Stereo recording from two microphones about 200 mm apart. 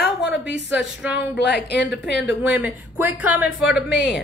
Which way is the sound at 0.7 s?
5° right (ahead or behind).